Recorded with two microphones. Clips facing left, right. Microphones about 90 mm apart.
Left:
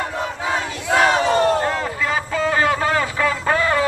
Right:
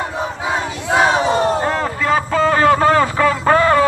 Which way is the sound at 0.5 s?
20° right (ahead or behind).